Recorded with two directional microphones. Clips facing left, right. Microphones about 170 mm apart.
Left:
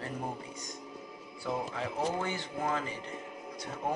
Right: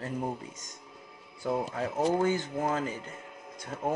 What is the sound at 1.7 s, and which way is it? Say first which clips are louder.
Speech: right 5 dB; 45° right (ahead or behind).